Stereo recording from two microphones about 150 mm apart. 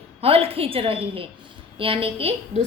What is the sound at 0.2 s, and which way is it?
A woman's voice, 40° right (ahead or behind).